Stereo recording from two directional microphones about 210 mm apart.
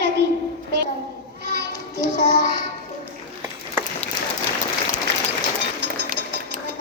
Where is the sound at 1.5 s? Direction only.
50° right (ahead or behind).